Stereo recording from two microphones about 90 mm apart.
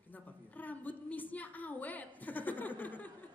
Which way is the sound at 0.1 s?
20° left (ahead or behind).